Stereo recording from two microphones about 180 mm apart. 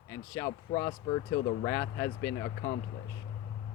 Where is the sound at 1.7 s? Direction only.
15° left (ahead or behind).